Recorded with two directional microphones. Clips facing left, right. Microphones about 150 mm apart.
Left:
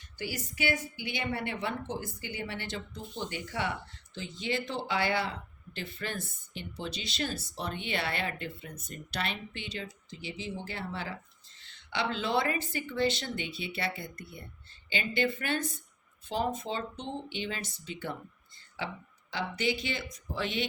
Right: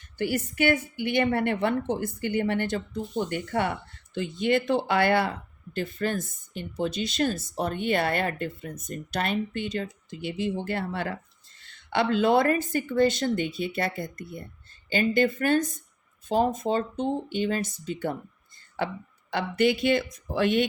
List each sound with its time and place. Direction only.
0.2 s a woman's voice: 55° right (ahead or behind)